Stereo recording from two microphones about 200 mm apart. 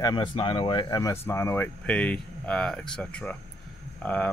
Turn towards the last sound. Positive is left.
turn(degrees=5)  # may be behind; listen again after turning